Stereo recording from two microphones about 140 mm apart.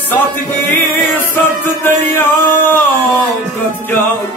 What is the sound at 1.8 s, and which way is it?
Music, 15° left (ahead or behind).